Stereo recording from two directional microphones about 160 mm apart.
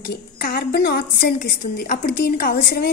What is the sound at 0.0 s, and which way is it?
A woman's voice, 70° left (ahead or behind).